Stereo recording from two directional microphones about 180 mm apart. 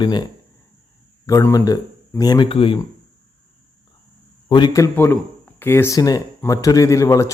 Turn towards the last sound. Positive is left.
turn(degrees=15)  # may be behind; listen again after turning